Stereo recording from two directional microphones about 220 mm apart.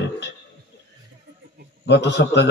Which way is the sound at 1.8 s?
50° left (ahead or behind).